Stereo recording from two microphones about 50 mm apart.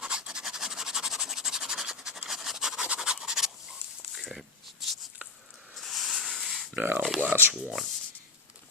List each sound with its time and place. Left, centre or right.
0.0 s scratch: centre
3.0 s rub: centre
4.1 s a sound: centre
5.7 s hiss: centre
6.7 s a sound: right
7.5 s speech: centre